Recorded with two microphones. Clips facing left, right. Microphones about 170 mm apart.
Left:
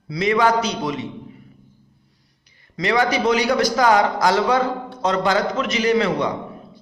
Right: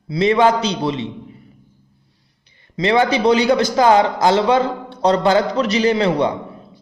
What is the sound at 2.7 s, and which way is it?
A man's voice, 25° right (ahead or behind).